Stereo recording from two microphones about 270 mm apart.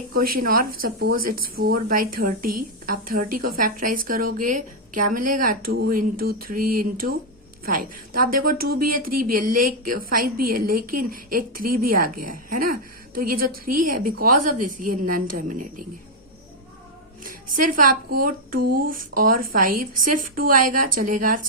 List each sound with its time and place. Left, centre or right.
0.3 s a woman's voice: right
17.2 s a woman's voice: right